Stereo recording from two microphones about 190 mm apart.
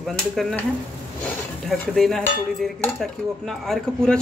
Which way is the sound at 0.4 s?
Centre (ahead or behind).